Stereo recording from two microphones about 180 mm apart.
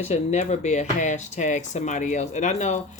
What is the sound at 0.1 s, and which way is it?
Speech, 40° left (ahead or behind).